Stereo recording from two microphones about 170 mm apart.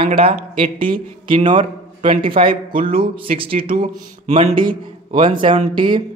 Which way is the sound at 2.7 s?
55° right (ahead or behind).